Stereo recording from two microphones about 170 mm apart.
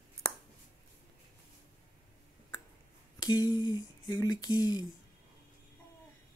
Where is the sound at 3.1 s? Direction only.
25° left (ahead or behind).